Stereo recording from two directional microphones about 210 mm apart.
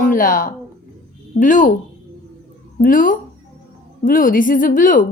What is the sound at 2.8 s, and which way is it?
A woman's voice, 40° left (ahead or behind).